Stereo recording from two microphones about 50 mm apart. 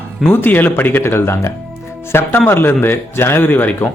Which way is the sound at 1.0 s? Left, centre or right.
Left.